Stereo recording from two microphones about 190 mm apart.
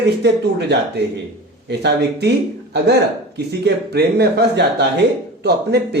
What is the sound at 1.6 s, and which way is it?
Speech, 65° right (ahead or behind).